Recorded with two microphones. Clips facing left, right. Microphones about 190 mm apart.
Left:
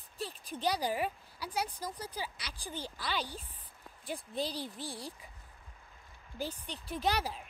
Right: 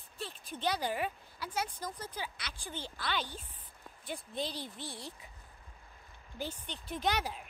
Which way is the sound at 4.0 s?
35° left (ahead or behind).